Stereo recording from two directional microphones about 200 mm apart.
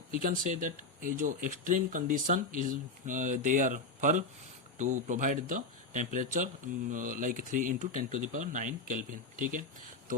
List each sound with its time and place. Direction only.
0.1 s speech: 45° right (ahead or behind)